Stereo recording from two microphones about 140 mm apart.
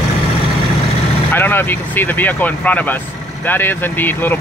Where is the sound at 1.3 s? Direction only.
15° left (ahead or behind).